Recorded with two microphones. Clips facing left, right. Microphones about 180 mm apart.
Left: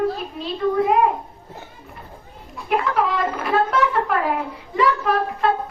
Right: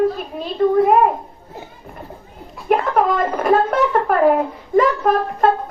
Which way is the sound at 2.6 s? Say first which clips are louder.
Right 5 dB; 50° right (ahead or behind).